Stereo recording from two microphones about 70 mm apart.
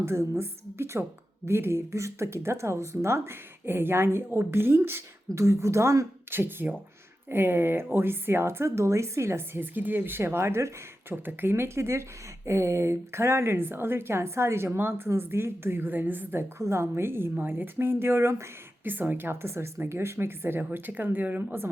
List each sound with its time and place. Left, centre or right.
0.0 s a woman's voice: right
5.3 s speech: right
6.3 s a woman's voice: right
11.1 s a woman's voice: right
18.9 s a woman's voice: right